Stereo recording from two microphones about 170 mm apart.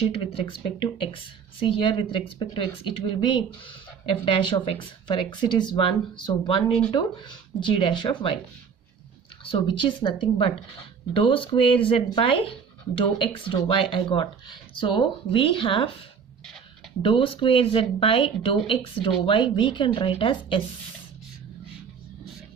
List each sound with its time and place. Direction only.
0.0 s speech: 30° left (ahead or behind)
9.4 s speech: 30° left (ahead or behind)
17.0 s speech: 30° left (ahead or behind)